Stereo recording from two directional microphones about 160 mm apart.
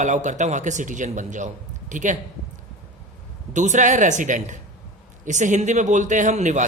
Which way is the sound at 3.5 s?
50° right (ahead or behind).